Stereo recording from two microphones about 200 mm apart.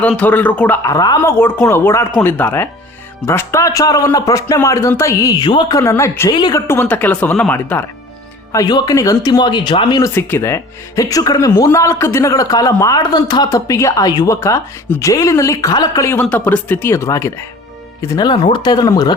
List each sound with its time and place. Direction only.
0.0 s speech: 10° left (ahead or behind)
8.5 s speech: 20° left (ahead or behind)